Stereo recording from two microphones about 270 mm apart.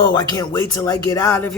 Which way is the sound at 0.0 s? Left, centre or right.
Centre.